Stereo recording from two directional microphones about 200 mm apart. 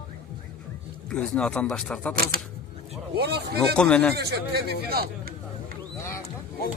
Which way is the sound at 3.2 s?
55° right (ahead or behind).